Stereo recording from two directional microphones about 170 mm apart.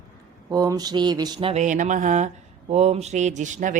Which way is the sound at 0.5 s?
20° right (ahead or behind).